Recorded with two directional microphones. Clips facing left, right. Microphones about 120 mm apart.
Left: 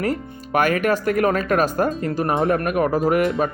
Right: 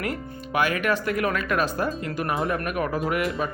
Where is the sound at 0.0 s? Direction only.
40° left (ahead or behind).